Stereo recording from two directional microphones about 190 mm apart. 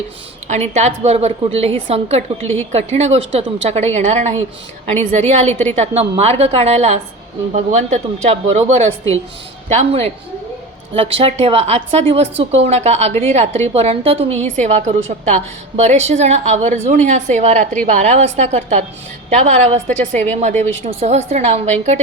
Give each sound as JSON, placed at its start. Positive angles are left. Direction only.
{"t": 0.4, "sound": "a woman's voice", "side_deg": -35}